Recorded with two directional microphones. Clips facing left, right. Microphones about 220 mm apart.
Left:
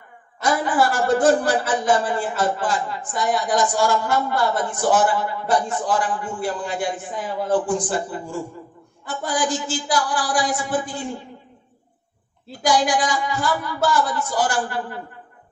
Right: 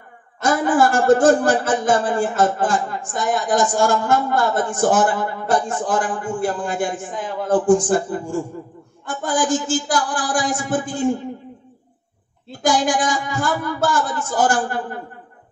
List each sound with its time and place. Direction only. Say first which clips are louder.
0.4 s speech: right 3 dB; 45° right (ahead or behind)
12.6 s speech: right 1 dB; 45° right (ahead or behind)